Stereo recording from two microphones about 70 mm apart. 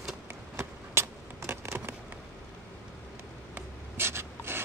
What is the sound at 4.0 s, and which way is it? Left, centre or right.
Filing, right.